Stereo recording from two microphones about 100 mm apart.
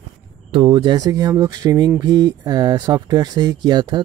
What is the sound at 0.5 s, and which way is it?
Speech, 50° right (ahead or behind).